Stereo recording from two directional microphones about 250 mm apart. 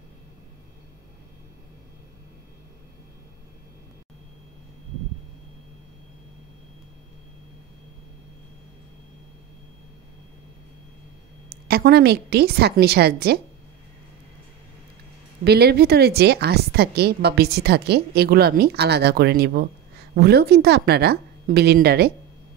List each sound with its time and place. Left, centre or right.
11.4 s a woman's voice: right
15.4 s a woman's voice: right